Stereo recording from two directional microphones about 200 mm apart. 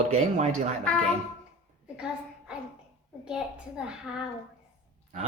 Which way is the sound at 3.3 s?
5° right (ahead or behind).